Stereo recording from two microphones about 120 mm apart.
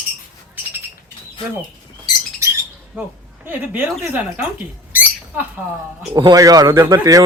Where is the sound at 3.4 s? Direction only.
15° right (ahead or behind).